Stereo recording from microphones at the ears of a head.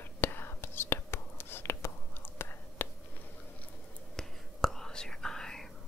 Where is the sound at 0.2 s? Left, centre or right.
Left.